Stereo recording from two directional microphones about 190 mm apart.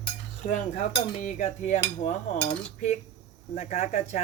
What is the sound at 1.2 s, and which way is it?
Speech, 40° left (ahead or behind).